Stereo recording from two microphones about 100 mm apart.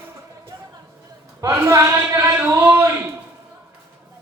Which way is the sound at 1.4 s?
25° right (ahead or behind).